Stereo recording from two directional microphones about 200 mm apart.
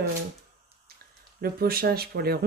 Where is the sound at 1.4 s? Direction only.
50° right (ahead or behind).